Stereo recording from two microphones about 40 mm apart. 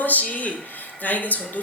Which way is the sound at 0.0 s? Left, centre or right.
Left.